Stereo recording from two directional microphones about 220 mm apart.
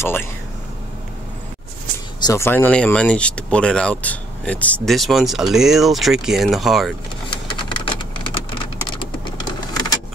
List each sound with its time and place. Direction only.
0.0 s speech: 10° left (ahead or behind)
2.2 s speech: 10° left (ahead or behind)
7.2 s a sound: 20° left (ahead or behind)